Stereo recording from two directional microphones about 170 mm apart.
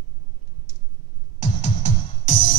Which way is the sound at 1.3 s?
45° left (ahead or behind).